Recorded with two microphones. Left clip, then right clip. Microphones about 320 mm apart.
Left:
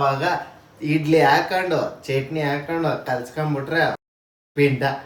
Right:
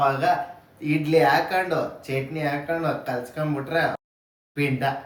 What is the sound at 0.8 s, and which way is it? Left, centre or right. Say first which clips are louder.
Speech: left 2 dB; centre.